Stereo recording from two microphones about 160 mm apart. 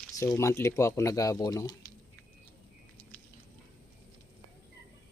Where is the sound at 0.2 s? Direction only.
15° left (ahead or behind).